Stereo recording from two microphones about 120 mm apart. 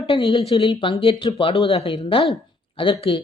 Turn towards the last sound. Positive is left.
turn(degrees=45)  # may be behind; listen again after turning